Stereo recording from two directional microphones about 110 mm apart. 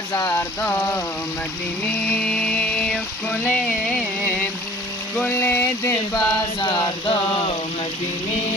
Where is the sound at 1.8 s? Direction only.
5° left (ahead or behind).